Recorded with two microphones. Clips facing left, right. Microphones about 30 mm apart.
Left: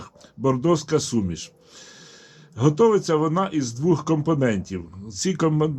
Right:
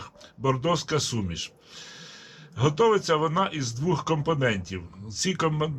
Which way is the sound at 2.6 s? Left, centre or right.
Right.